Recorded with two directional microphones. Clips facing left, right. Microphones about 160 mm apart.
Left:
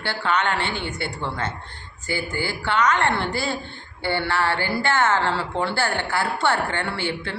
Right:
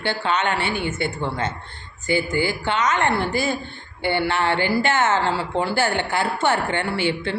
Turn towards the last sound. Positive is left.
turn(degrees=-15)  # may be behind; listen again after turning